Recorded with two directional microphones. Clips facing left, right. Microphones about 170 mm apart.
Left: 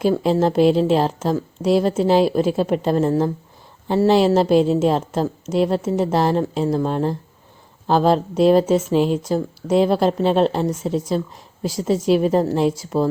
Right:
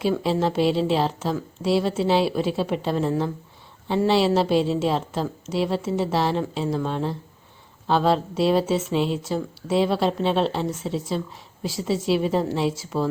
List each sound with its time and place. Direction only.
0.2 s a woman's voice: 45° left (ahead or behind)